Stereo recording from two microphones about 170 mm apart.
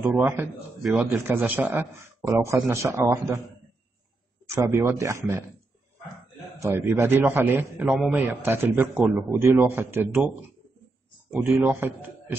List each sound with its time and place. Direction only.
0.0 s a man's voice: 15° right (ahead or behind)
4.6 s a man's voice: 15° right (ahead or behind)
6.6 s a man's voice: 15° right (ahead or behind)
11.3 s a man's voice: 15° right (ahead or behind)